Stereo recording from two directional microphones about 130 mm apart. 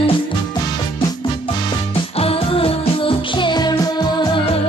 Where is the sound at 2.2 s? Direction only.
50° left (ahead or behind).